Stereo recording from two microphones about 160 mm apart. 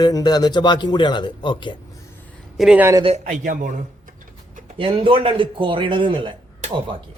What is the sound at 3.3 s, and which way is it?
Speech, 50° right (ahead or behind).